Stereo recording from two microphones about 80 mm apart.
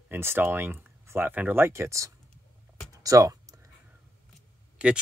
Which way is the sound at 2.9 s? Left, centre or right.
Right.